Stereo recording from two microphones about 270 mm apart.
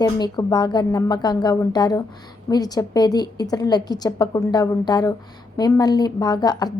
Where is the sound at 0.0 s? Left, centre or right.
Centre.